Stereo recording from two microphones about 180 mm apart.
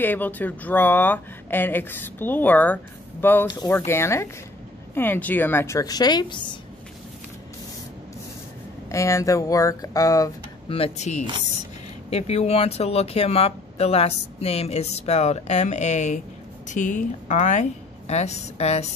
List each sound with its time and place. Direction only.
0.0 s speech: 10° left (ahead or behind); by 6.6 s 25° left (ahead or behind)
8.8 s speech: 15° left (ahead or behind)
10.7 s a woman's voice: 35° left (ahead or behind)